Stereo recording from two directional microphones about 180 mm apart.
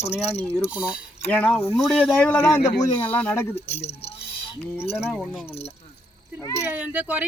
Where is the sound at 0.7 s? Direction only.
5° right (ahead or behind).